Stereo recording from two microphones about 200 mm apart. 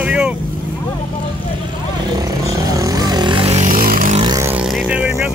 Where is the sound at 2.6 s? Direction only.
20° right (ahead or behind); by 4.2 s 45° right (ahead or behind).